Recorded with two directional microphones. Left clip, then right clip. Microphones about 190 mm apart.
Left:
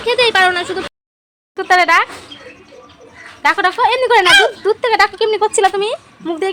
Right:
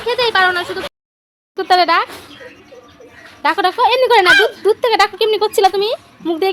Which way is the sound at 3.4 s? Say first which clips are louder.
Left 1 dB; 15° right (ahead or behind).